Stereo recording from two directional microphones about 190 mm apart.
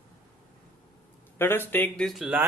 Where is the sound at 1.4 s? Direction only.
10° left (ahead or behind).